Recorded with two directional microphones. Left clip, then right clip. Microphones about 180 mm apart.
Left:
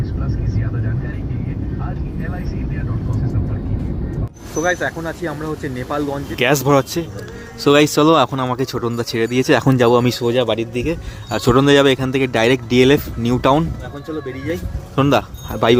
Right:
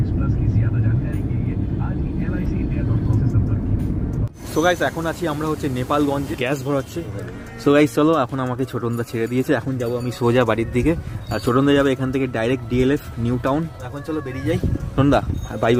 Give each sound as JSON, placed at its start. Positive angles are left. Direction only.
{"t": 4.5, "sound": "speech", "side_deg": -10}
{"t": 6.4, "sound": "speech", "side_deg": 25}
{"t": 7.6, "sound": "speech", "side_deg": 10}
{"t": 9.6, "sound": "speech", "side_deg": 40}
{"t": 10.2, "sound": "speech", "side_deg": -5}
{"t": 11.3, "sound": "speech", "side_deg": 10}
{"t": 14.9, "sound": "speech", "side_deg": 10}